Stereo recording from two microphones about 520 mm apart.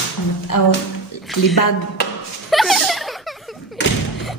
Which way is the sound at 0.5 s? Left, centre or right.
Left.